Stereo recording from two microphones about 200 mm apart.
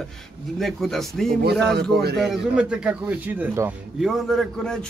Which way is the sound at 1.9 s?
55° right (ahead or behind).